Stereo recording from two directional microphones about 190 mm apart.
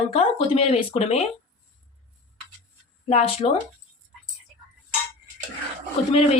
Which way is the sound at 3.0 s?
35° left (ahead or behind).